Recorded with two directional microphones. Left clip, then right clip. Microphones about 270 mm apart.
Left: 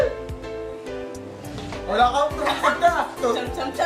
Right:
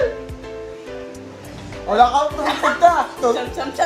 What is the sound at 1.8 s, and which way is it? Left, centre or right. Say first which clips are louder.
Speech: right 5 dB; centre.